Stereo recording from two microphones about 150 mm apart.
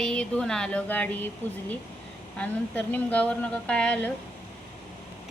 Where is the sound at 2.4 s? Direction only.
10° left (ahead or behind).